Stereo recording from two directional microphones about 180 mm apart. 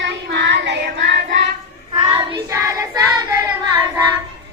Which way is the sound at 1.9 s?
20° right (ahead or behind).